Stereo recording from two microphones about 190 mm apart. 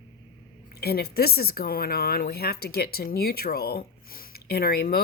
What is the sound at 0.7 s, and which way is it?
Speech, 55° left (ahead or behind).